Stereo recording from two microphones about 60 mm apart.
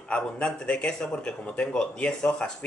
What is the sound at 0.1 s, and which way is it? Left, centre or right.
A man's voice, centre.